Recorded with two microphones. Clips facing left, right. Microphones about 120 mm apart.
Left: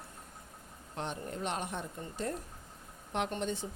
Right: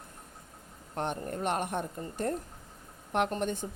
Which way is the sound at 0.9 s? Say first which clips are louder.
Right 5 dB; 55° right (ahead or behind).